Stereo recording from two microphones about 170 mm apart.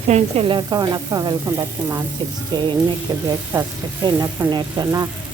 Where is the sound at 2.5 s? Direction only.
25° right (ahead or behind).